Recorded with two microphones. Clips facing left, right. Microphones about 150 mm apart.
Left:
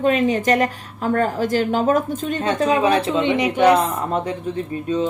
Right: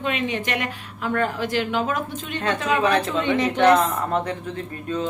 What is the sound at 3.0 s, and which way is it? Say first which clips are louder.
A woman's voice: left 3 dB; 20° left (ahead or behind).